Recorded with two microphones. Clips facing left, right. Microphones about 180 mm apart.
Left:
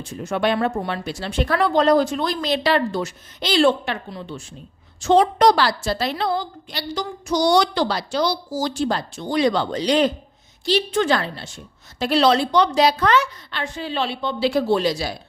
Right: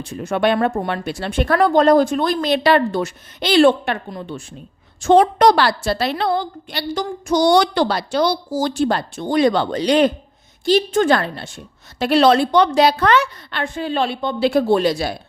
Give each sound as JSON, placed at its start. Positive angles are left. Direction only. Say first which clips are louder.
{"t": 0.0, "sound": "a woman's voice", "louder": "right 3 dB", "side_deg": -60}
{"t": 10.7, "sound": "a woman's voice", "louder": "right 4 dB", "side_deg": -45}